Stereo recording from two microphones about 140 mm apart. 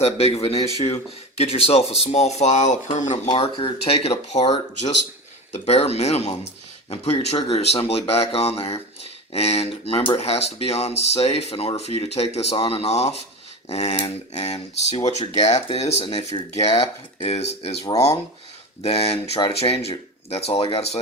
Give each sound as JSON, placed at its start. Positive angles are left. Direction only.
{"t": 0.0, "sound": "speech", "side_deg": 45}
{"t": 3.3, "sound": "speech", "side_deg": 45}
{"t": 16.3, "sound": "speech", "side_deg": 30}
{"t": 17.2, "sound": "speech", "side_deg": 50}
{"t": 17.8, "sound": "speech", "side_deg": 25}
{"t": 18.8, "sound": "speech", "side_deg": 45}